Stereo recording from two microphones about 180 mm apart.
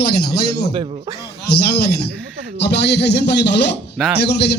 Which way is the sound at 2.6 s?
70° left (ahead or behind).